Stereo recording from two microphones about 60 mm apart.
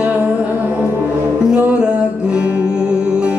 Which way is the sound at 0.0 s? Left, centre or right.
Right.